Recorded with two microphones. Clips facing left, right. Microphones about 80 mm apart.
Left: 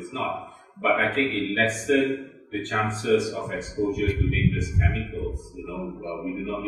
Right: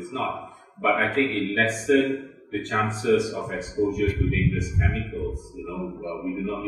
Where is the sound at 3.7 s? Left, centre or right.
Centre.